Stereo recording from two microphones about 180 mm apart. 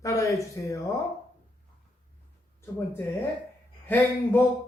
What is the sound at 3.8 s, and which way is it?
Speech, 10° left (ahead or behind).